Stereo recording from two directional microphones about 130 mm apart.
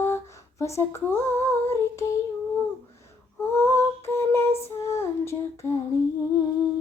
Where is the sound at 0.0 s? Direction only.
20° left (ahead or behind).